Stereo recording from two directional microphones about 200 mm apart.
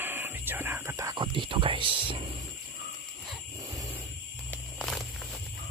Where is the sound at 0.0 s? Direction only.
10° right (ahead or behind); by 2.2 s 25° right (ahead or behind).